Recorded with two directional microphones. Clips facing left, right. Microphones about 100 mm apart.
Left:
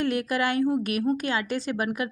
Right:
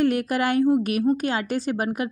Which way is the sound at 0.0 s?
40° right (ahead or behind).